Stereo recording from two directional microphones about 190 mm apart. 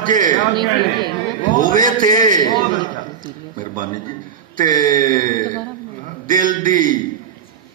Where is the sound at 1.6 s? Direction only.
45° right (ahead or behind).